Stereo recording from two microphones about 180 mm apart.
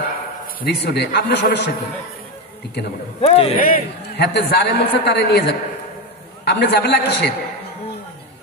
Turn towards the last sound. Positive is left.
turn(degrees=65)  # may be behind; listen again after turning